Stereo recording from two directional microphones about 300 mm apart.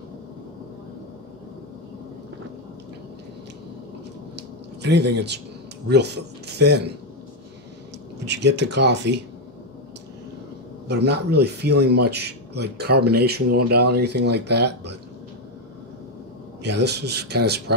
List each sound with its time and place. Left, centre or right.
4.4 s a sound: right
5.9 s speech: right
8.3 s speech: right
10.9 s speech: right
16.6 s speech: right